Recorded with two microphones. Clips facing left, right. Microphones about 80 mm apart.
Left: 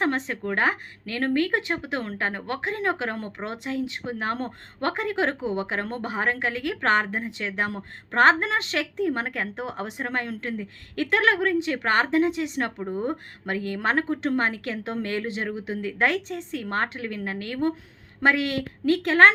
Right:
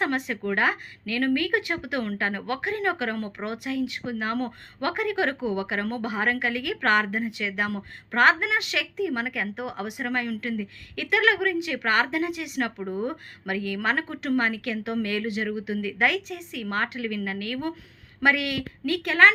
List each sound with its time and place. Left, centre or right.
0.0 s a woman's voice: left